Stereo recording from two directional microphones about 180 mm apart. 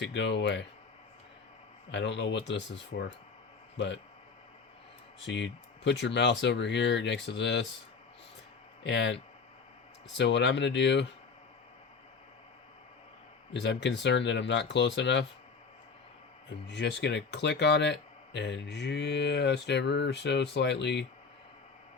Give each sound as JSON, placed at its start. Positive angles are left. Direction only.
{"t": 0.0, "sound": "speech", "side_deg": 80}
{"t": 1.9, "sound": "speech", "side_deg": 80}
{"t": 5.2, "sound": "speech", "side_deg": 75}
{"t": 8.8, "sound": "speech", "side_deg": 85}
{"t": 13.5, "sound": "speech", "side_deg": 75}
{"t": 16.6, "sound": "speech", "side_deg": 70}